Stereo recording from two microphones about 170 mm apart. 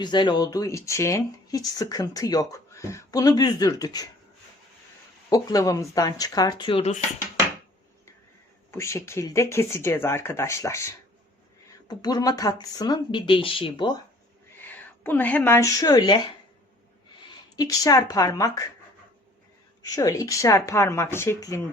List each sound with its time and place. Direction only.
0.0 s speech: 25° left (ahead or behind)
5.3 s speech: 20° left (ahead or behind)
8.7 s speech: 15° left (ahead or behind)
14.6 s a woman's voice: 10° left (ahead or behind)
17.6 s speech: 20° left (ahead or behind)
19.8 s speech: 20° left (ahead or behind)